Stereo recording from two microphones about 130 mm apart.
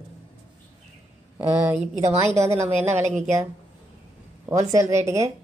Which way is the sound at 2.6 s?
60° right (ahead or behind).